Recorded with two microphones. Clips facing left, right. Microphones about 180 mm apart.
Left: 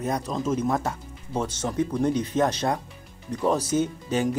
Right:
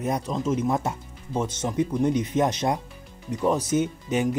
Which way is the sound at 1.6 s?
15° right (ahead or behind).